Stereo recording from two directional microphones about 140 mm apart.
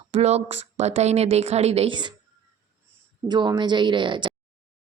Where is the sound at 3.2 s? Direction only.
30° right (ahead or behind).